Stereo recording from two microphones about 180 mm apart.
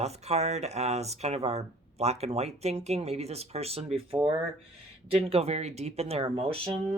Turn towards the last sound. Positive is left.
turn(degrees=-30)  # may be behind; listen again after turning